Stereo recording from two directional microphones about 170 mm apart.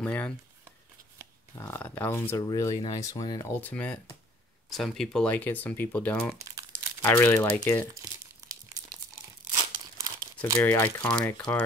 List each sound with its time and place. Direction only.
0.0 s speech: 10° left (ahead or behind)
1.5 s speech: 15° left (ahead or behind)
6.4 s crumpling: 20° right (ahead or behind)
7.0 s speech: 10° left (ahead or behind)
7.9 s crumpling: 20° right (ahead or behind)
10.6 s speech: 10° left (ahead or behind)